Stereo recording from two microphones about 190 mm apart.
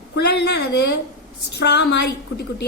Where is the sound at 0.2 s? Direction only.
60° left (ahead or behind).